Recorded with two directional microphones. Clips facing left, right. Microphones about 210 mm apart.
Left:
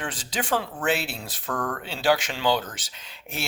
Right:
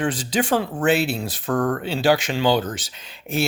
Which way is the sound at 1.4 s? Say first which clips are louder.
Right 8 dB; 30° right (ahead or behind).